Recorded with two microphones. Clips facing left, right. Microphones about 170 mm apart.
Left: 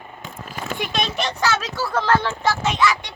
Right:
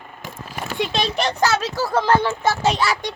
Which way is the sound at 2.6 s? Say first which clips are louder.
Even; 35° right (ahead or behind).